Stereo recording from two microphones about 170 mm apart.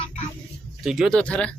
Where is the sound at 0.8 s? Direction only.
Centre (ahead or behind).